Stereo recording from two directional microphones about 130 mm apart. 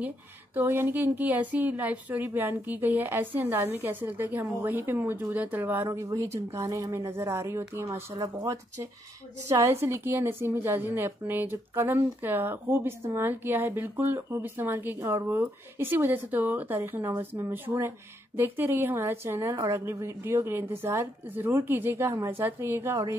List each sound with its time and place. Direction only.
0.6 s a woman's voice: 15° right (ahead or behind)